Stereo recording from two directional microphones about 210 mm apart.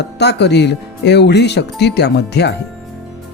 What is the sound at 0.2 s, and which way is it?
Speech, 55° left (ahead or behind).